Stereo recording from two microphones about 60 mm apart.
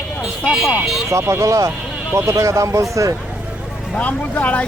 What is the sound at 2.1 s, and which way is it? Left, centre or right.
Speech, right.